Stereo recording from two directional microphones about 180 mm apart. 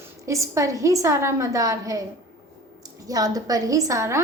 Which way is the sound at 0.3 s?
15° right (ahead or behind).